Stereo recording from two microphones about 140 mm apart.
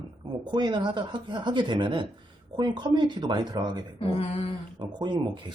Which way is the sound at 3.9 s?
45° left (ahead or behind).